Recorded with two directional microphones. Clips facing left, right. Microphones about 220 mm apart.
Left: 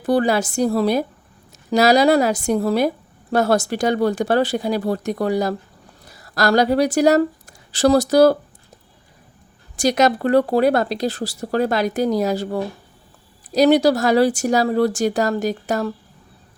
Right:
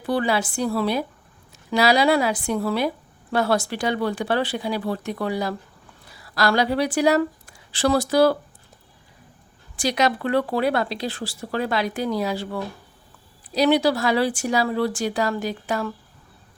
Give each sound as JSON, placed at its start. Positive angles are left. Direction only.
{"t": 0.0, "sound": "speech", "side_deg": 45}
{"t": 9.7, "sound": "speech", "side_deg": 45}